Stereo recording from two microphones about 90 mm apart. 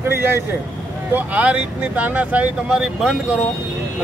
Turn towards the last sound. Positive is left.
turn(degrees=-5)  # may be behind; listen again after turning